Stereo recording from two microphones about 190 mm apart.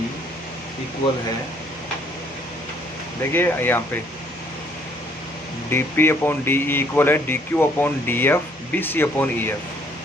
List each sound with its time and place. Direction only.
3.3 s speech: 10° left (ahead or behind)
5.7 s speech: 10° left (ahead or behind)